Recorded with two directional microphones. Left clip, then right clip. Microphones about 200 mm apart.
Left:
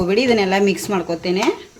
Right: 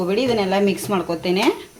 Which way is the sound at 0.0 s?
15° left (ahead or behind).